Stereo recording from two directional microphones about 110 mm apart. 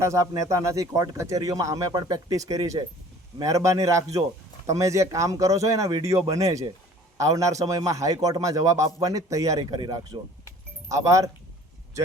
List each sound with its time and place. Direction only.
0.0 s a man's voice: 30° right (ahead or behind)
10.8 s speech: 30° right (ahead or behind)